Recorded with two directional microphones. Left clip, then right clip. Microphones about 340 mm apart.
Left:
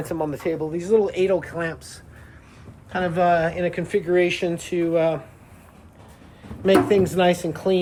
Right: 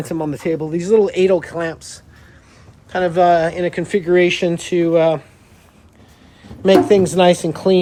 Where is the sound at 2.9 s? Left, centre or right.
Centre.